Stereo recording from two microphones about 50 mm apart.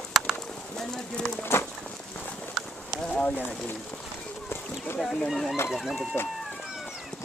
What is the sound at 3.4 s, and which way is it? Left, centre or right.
Speech, left.